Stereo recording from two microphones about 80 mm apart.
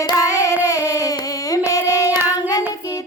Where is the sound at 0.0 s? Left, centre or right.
Left.